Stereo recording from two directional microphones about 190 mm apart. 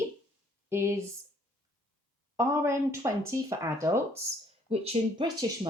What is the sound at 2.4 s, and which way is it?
Speech, 15° right (ahead or behind).